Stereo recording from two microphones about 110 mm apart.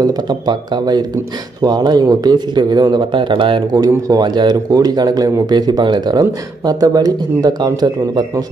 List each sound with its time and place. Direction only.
0.0 s speech: 35° right (ahead or behind)
3.7 s speech: 35° right (ahead or behind)